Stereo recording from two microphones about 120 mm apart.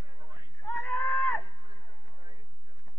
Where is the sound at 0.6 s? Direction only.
15° left (ahead or behind).